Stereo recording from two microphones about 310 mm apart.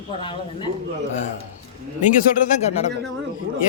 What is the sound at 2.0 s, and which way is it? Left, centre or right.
Speech, left.